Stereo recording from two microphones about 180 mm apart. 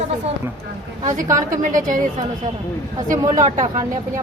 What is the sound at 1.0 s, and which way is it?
A woman's voice, 45° right (ahead or behind).